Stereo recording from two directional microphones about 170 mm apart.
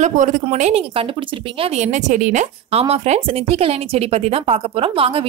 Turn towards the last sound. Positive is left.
turn(degrees=-35)  # may be behind; listen again after turning